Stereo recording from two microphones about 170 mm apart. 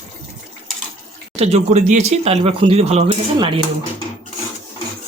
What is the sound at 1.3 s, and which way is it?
Speech, 40° right (ahead or behind).